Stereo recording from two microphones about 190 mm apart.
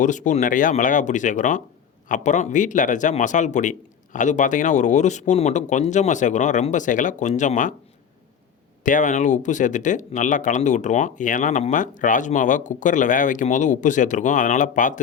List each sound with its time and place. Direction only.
0.0 s speech: 40° left (ahead or behind)
8.8 s speech: 40° left (ahead or behind)